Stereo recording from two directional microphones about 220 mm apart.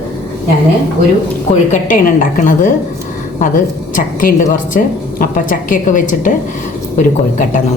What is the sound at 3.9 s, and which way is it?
Speech, 40° left (ahead or behind).